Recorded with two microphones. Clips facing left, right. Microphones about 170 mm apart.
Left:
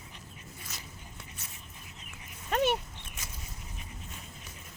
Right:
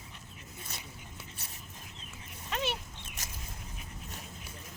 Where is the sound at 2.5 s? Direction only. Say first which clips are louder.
Left 7 dB; 50° left (ahead or behind).